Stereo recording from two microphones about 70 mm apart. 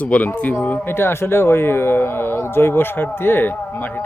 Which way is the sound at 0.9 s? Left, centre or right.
Left.